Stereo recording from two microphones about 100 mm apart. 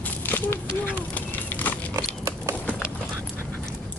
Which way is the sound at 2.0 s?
30° right (ahead or behind).